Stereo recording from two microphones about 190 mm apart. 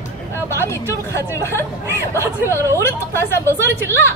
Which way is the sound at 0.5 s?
15° left (ahead or behind).